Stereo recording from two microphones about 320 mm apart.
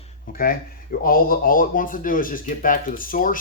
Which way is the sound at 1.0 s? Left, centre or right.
Left.